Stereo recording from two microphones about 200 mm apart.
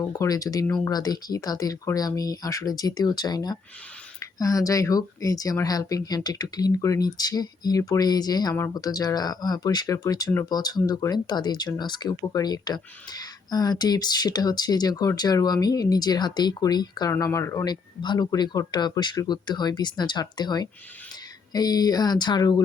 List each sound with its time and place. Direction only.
0.0 s speech: 20° left (ahead or behind)